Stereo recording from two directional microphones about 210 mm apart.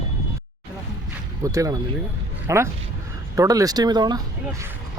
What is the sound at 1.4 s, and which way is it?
Speech, 15° right (ahead or behind).